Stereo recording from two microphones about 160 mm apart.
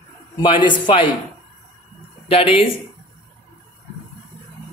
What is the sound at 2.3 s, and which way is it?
Speech, 35° left (ahead or behind).